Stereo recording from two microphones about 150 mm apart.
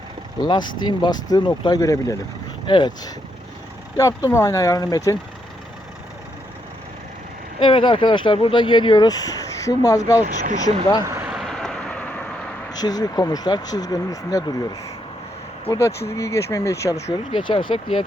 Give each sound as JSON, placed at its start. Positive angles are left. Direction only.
{"t": 0.3, "sound": "speech", "side_deg": 30}
{"t": 7.6, "sound": "speech", "side_deg": 35}
{"t": 10.2, "sound": "speech", "side_deg": -55}
{"t": 11.3, "sound": "vehicle", "side_deg": 0}
{"t": 12.7, "sound": "speech", "side_deg": 25}
{"t": 17.3, "sound": "speech", "side_deg": 35}